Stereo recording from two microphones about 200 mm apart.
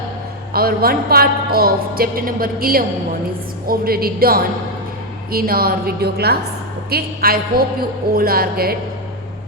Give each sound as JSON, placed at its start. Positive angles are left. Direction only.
{"t": 0.5, "sound": "a woman's voice", "side_deg": -50}